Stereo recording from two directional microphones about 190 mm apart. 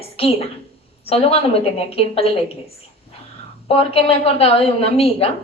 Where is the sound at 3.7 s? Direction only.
30° left (ahead or behind).